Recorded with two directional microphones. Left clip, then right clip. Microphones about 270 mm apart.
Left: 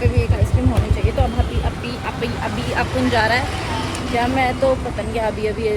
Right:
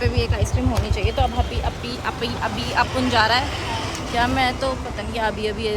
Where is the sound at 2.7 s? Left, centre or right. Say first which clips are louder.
Even; centre.